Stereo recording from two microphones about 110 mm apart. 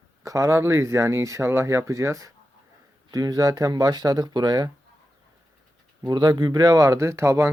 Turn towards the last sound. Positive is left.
turn(degrees=-25)  # may be behind; listen again after turning